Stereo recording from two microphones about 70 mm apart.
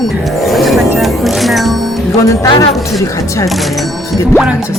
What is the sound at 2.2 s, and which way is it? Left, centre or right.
Chopping, left.